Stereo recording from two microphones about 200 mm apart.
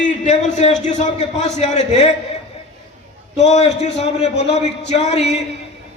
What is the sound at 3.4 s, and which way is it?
A man's voice, 35° left (ahead or behind).